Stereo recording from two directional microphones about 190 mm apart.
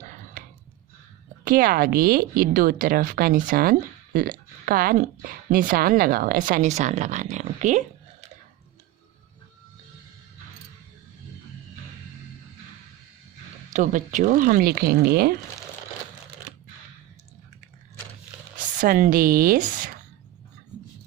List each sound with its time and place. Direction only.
0.0 s a sound: 45° right (ahead or behind)
1.5 s speech: 50° right (ahead or behind)
13.7 s speech: 40° right (ahead or behind)
18.5 s speech: 45° right (ahead or behind)